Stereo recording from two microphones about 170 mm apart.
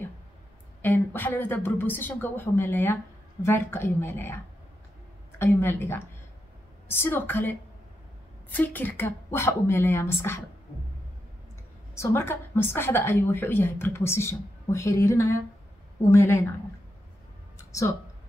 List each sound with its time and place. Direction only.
0.8 s a woman's voice: 10° left (ahead or behind)
5.4 s a woman's voice: 10° left (ahead or behind)
11.9 s a woman's voice: 15° left (ahead or behind)